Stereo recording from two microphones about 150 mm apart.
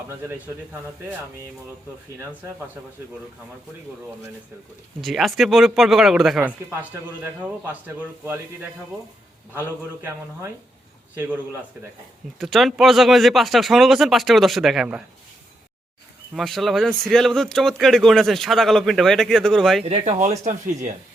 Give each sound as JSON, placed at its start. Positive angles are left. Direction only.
{"t": 0.1, "sound": "a man's voice", "side_deg": -15}
{"t": 4.9, "sound": "speech", "side_deg": 0}
{"t": 9.6, "sound": "a man's voice", "side_deg": -15}
{"t": 12.4, "sound": "speech", "side_deg": 0}
{"t": 16.3, "sound": "speech", "side_deg": 0}
{"t": 19.8, "sound": "speech", "side_deg": -50}